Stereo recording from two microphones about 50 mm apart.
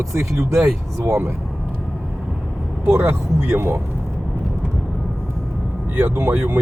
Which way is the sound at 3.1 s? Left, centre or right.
Right.